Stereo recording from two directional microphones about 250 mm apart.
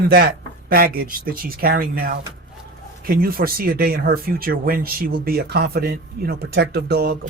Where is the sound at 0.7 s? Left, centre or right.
Right.